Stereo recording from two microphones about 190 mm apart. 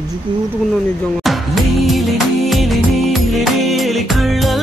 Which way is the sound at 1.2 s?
Centre (ahead or behind).